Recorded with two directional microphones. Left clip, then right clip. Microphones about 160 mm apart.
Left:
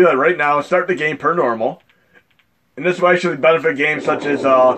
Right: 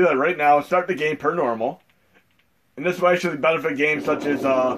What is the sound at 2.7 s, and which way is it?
A man's voice, 50° left (ahead or behind).